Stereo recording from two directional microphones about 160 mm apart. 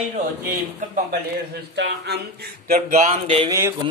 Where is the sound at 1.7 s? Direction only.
90° right.